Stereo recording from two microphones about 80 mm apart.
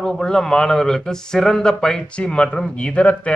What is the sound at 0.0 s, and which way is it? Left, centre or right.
Speech, centre.